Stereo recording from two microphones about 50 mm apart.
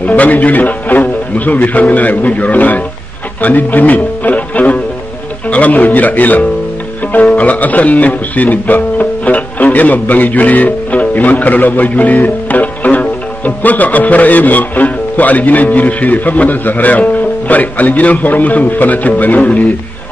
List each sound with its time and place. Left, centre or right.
0.0 s speech: left